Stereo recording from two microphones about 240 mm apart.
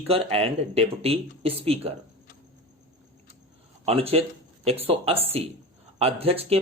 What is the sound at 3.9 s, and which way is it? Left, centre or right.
Speech, right.